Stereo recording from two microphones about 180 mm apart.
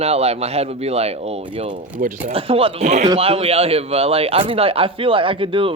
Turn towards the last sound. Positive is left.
turn(degrees=-30)  # may be behind; listen again after turning